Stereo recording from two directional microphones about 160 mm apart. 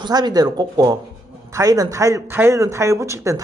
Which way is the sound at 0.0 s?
25° right (ahead or behind).